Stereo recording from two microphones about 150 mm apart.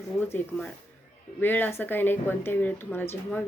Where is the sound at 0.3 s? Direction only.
15° left (ahead or behind).